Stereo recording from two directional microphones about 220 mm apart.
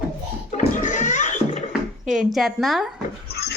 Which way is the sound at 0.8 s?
35° left (ahead or behind).